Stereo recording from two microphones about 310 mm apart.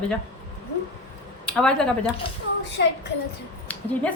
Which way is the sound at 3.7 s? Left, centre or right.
Centre.